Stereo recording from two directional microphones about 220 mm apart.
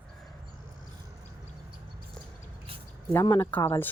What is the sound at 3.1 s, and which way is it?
Speech, 10° left (ahead or behind).